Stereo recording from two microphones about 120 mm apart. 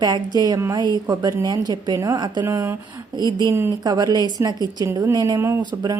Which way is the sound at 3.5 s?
25° right (ahead or behind).